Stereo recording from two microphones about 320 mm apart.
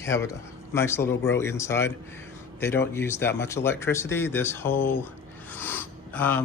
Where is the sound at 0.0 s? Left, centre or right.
Centre.